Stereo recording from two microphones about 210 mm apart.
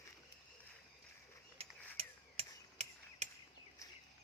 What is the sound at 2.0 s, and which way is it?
Hammer, 30° right (ahead or behind).